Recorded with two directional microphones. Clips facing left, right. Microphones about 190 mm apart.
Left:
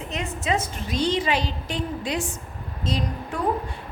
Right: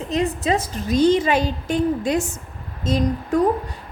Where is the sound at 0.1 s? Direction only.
35° right (ahead or behind).